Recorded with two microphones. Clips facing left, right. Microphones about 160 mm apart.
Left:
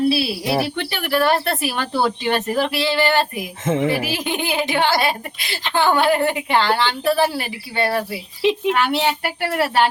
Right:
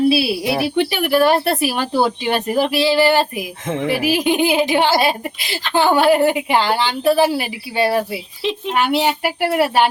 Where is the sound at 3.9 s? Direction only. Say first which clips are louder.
Right 5 dB; 15° right (ahead or behind).